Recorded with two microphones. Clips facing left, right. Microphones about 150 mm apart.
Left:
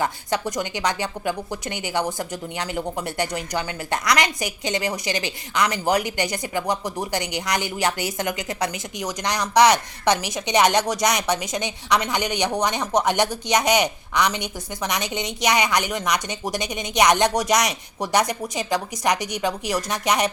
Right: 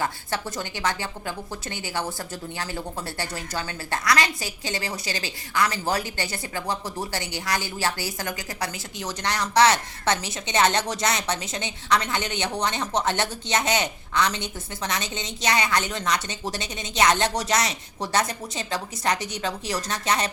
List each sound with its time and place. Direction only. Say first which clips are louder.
0.0 s speech: left 4 dB; 15° left (ahead or behind)